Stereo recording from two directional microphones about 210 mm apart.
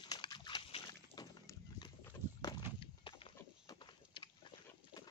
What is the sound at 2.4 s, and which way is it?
Clip-clop, 20° left (ahead or behind).